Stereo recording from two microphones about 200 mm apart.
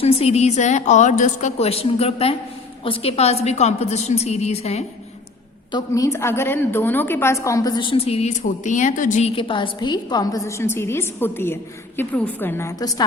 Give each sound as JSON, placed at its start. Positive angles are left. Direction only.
{"t": 0.0, "sound": "a woman's voice", "side_deg": 30}
{"t": 5.7, "sound": "a woman's voice", "side_deg": 15}